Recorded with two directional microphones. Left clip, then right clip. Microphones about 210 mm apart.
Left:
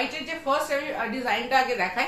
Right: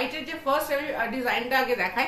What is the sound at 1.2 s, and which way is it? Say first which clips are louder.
Speech: left 3 dB; 10° right (ahead or behind).